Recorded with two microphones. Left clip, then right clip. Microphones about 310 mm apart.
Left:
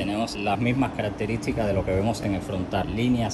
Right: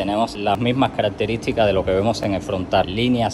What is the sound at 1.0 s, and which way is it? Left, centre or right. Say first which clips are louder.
Speech: right 8 dB; right.